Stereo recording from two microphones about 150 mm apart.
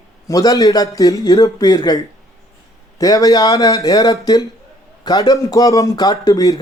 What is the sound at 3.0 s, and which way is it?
A man's voice, 25° left (ahead or behind).